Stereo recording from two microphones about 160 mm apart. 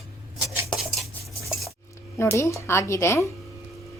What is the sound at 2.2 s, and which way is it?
Speech, 20° left (ahead or behind).